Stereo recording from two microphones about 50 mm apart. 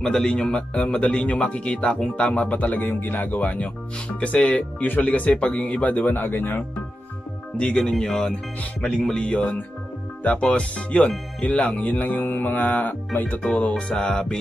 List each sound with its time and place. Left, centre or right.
0.0 s speech: centre; by 2.9 s left
2.9 s music: left
4.2 s speech: left
7.5 s music: centre
10.2 s speech: left
11.4 s music: left
13.6 s speech: left